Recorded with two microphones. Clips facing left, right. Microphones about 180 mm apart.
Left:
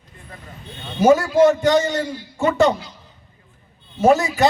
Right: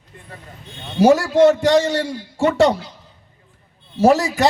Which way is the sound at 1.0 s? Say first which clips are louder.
Right 1 dB; 75° right (ahead or behind).